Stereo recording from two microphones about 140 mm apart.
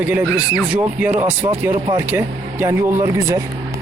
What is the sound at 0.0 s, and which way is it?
Speech, 10° right (ahead or behind).